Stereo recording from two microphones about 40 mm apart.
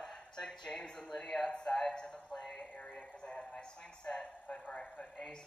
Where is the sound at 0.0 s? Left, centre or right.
Centre.